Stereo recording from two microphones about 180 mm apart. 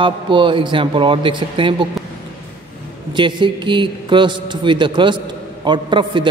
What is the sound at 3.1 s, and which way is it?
A man's voice, 25° right (ahead or behind).